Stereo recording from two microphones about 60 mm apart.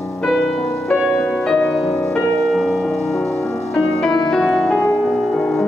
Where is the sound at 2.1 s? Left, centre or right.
Centre.